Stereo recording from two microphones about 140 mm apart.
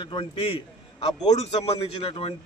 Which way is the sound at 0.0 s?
40° left (ahead or behind).